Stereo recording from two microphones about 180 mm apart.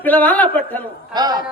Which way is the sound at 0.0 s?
10° left (ahead or behind).